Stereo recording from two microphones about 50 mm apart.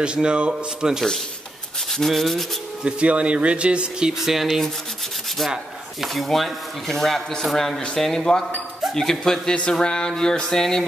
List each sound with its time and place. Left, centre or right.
0.0 s speech: right
1.9 s speech: centre
2.8 s speech: right
4.1 s speech: centre
6.0 s speech: centre